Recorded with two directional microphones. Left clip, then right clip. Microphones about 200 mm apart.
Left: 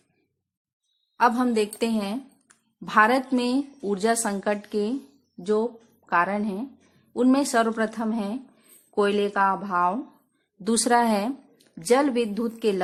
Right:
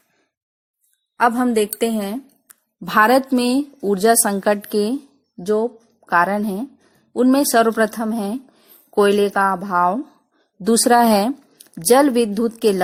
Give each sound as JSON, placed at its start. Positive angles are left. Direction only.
{"t": 1.1, "sound": "speech", "side_deg": -30}